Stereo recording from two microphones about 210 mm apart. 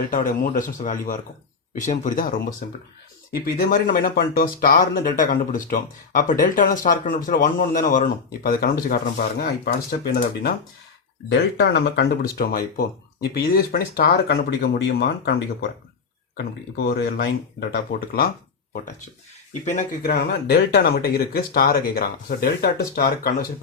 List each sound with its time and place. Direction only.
0.1 s speech: 40° left (ahead or behind)
11.3 s speech: 55° left (ahead or behind)
16.4 s speech: 50° left (ahead or behind)
19.6 s speech: 40° left (ahead or behind)